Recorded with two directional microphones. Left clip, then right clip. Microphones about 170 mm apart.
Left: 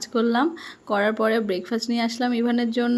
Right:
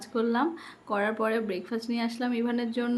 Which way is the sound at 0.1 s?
30° left (ahead or behind).